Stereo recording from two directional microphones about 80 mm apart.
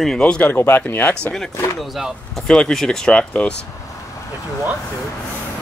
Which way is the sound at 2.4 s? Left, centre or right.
Centre.